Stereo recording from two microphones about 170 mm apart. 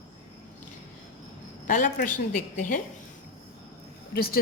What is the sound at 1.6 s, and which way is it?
A woman's voice, 50° left (ahead or behind).